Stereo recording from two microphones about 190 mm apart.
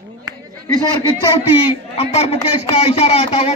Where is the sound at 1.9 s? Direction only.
35° left (ahead or behind).